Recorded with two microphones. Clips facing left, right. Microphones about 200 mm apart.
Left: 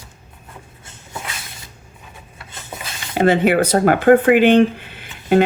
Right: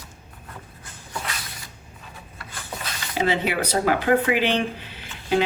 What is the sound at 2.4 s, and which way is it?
Rub, 25° left (ahead or behind).